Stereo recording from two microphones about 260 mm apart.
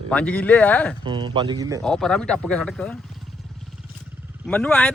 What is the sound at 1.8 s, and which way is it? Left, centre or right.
Speech, centre.